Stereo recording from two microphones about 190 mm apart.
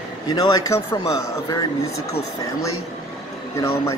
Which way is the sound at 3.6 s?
15° left (ahead or behind).